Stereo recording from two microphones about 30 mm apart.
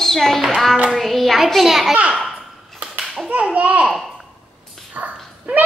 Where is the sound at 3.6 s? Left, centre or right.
Right.